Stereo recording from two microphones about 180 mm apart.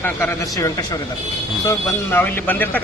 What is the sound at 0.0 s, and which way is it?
A man's voice, 10° left (ahead or behind).